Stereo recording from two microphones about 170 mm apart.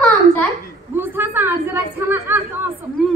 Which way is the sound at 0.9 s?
10° right (ahead or behind).